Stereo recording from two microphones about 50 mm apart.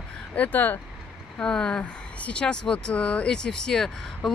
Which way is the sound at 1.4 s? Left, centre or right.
Centre.